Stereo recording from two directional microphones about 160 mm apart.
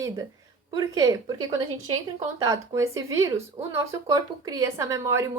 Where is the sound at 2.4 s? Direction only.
20° right (ahead or behind).